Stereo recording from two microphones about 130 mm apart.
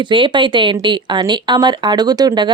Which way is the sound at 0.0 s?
40° right (ahead or behind).